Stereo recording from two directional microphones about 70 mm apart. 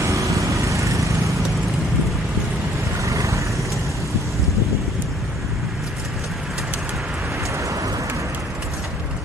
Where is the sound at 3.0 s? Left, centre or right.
Right.